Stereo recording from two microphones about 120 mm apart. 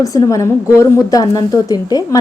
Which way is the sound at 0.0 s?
30° left (ahead or behind).